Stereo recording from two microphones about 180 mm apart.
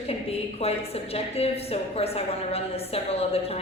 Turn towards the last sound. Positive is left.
turn(degrees=35)  # may be behind; listen again after turning